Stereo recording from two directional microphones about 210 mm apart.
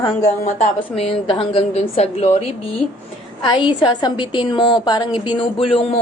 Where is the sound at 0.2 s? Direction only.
35° left (ahead or behind).